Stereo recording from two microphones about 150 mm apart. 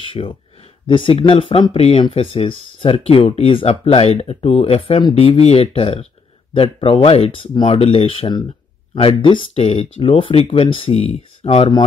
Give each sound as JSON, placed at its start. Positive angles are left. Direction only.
{"t": 0.0, "sound": "speech", "side_deg": 35}